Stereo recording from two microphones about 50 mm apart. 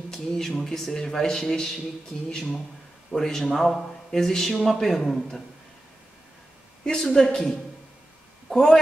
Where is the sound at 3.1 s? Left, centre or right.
Centre.